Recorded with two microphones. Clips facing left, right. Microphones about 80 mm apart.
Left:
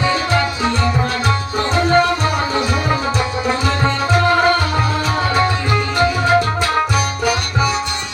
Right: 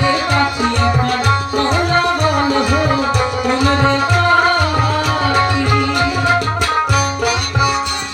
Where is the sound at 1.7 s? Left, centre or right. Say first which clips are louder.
Left 3 dB; right.